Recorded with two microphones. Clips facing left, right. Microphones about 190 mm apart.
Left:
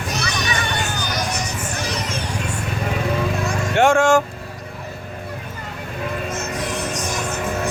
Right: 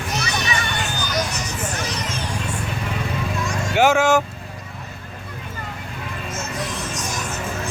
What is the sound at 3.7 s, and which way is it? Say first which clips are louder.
Speech: left 1 dB; 5° right (ahead or behind).